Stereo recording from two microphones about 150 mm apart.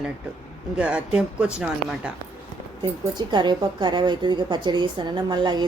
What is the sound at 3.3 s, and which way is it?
A woman's voice, 30° right (ahead or behind).